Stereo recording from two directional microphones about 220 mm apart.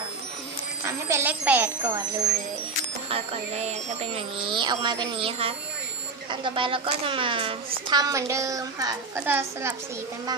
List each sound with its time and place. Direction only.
0.9 s a woman's voice: 15° right (ahead or behind)
3.1 s a woman's voice: 30° right (ahead or behind); by 9.7 s 10° right (ahead or behind)